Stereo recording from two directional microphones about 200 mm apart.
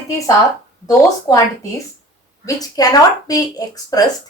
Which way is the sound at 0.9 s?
15° left (ahead or behind).